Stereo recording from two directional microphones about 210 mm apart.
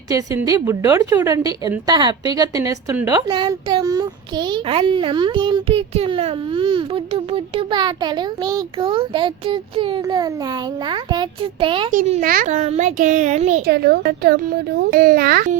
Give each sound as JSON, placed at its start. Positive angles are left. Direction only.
{"t": 0.1, "sound": "a woman's voice", "side_deg": -15}
{"t": 11.9, "sound": "a child's voice", "side_deg": -35}
{"t": 13.7, "sound": "a woman's voice", "side_deg": -50}